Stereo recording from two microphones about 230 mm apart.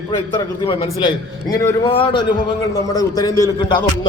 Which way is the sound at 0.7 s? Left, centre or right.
Left.